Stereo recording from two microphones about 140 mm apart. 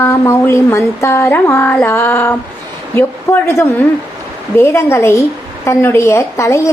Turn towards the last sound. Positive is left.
turn(degrees=20)  # may be behind; listen again after turning